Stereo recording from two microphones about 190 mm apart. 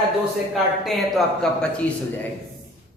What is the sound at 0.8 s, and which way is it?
A woman's voice, centre (ahead or behind).